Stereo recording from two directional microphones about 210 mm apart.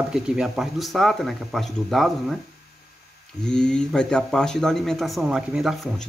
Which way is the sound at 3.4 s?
5° left (ahead or behind).